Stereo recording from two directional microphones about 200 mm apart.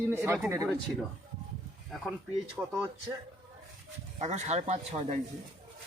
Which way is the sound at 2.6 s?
10° right (ahead or behind).